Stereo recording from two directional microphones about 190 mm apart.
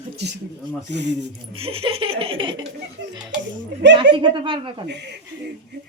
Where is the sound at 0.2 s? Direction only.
60° right (ahead or behind).